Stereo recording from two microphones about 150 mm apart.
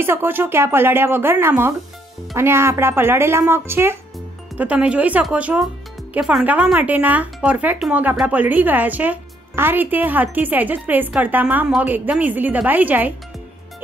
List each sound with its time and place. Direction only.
0.0 s speech: 15° right (ahead or behind)